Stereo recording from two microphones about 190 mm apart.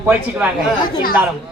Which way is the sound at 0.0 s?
10° right (ahead or behind).